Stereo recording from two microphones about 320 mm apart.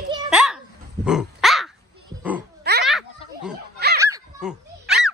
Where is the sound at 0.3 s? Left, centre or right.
Centre.